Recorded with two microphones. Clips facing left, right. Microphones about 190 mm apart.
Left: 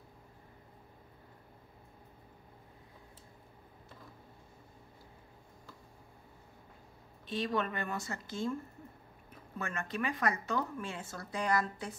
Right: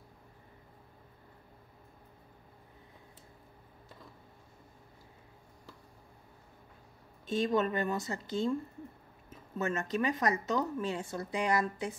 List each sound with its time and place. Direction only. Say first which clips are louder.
7.4 s a woman's voice: right 5 dB; 25° right (ahead or behind)
9.6 s a woman's voice: right 5 dB; 20° right (ahead or behind)